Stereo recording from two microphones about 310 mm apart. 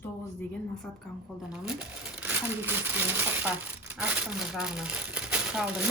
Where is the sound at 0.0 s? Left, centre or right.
Centre.